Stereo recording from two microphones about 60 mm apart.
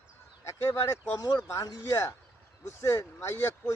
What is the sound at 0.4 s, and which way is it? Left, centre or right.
Speech, left.